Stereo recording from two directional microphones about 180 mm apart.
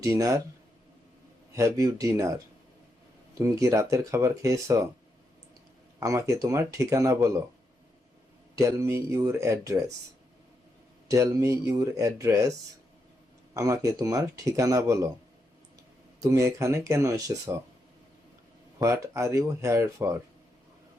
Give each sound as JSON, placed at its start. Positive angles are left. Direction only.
{"t": 0.0, "sound": "speech", "side_deg": -20}
{"t": 1.5, "sound": "speech", "side_deg": -20}
{"t": 3.3, "sound": "speech", "side_deg": -15}
{"t": 6.0, "sound": "speech", "side_deg": -15}
{"t": 8.5, "sound": "speech", "side_deg": -15}
{"t": 11.1, "sound": "speech", "side_deg": -15}
{"t": 16.2, "sound": "speech", "side_deg": -20}
{"t": 18.8, "sound": "speech", "side_deg": -15}